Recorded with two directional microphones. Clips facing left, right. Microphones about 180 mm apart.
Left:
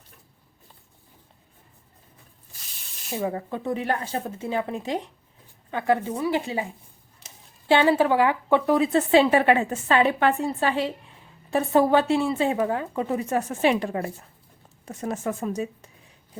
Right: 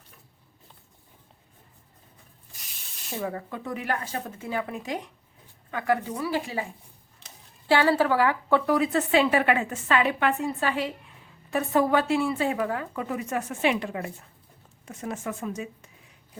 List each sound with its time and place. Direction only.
3.2 s speech: 25° left (ahead or behind)